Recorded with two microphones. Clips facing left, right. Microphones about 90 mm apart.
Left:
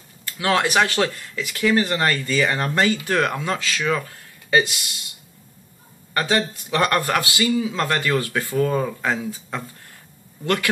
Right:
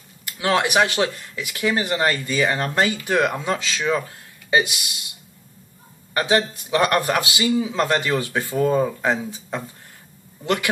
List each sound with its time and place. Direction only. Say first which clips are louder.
0.2 s speech: even; 15° right (ahead or behind)
6.1 s speech: right 2 dB; 15° right (ahead or behind)